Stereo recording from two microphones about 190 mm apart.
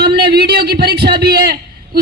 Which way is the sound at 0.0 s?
55° right (ahead or behind).